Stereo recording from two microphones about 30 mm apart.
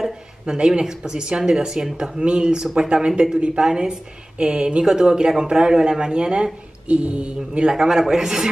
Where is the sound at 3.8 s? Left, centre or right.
Right.